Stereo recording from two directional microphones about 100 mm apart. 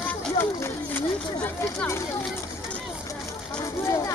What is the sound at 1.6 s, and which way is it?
Speech, 30° left (ahead or behind).